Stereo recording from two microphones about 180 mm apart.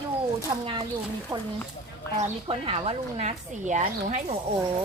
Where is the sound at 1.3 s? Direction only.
20° right (ahead or behind).